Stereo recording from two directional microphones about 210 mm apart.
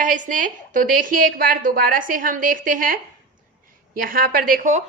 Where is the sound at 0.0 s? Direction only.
40° right (ahead or behind).